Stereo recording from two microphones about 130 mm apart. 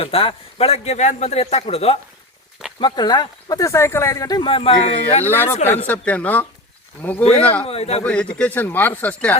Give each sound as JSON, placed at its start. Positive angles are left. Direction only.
{"t": 0.0, "sound": "a man's voice", "side_deg": 45}
{"t": 2.8, "sound": "speech", "side_deg": 35}
{"t": 4.4, "sound": "a man's voice", "side_deg": 45}
{"t": 5.2, "sound": "speech", "side_deg": 15}
{"t": 7.6, "sound": "a man's voice", "side_deg": 50}
{"t": 8.0, "sound": "speech", "side_deg": 10}